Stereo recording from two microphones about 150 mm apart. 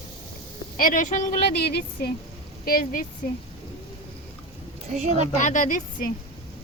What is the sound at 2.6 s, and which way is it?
Speech, 75° left (ahead or behind).